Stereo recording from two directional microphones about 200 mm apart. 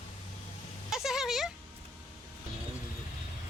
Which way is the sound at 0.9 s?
Centre (ahead or behind).